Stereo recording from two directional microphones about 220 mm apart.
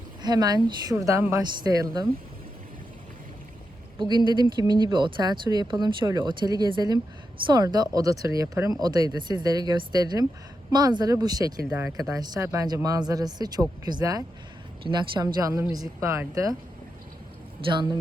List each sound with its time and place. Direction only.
0.2 s speech: 20° right (ahead or behind)
3.9 s speech: 20° right (ahead or behind)